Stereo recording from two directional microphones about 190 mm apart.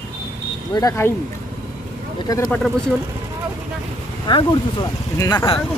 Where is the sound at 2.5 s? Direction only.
5° left (ahead or behind).